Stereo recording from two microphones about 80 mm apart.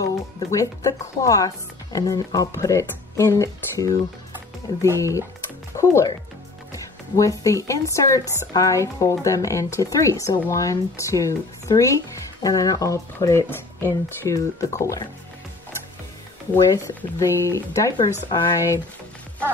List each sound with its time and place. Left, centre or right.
0.0 s speech: left
6.7 s speech: left
13.5 s speech: left
16.5 s speech: left